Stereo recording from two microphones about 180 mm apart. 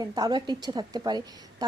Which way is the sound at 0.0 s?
20° right (ahead or behind).